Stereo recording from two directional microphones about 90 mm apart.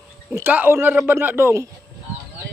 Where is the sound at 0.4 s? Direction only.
20° right (ahead or behind).